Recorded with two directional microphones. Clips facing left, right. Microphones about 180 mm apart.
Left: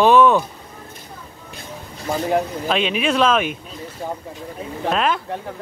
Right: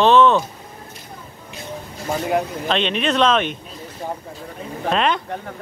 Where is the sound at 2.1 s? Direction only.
Centre (ahead or behind).